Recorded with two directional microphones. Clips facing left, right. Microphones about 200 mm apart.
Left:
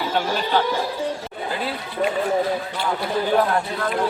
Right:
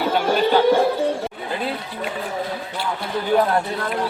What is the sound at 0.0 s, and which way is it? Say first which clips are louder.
Speech: right 5 dB; 60° right (ahead or behind).